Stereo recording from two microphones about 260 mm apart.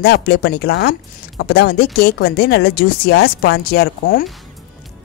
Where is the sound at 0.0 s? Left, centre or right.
Left.